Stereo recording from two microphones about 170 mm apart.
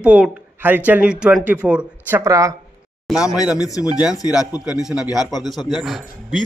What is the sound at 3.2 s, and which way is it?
Speech, 20° left (ahead or behind).